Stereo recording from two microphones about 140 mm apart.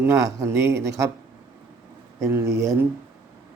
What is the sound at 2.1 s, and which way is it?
Speech, 20° right (ahead or behind).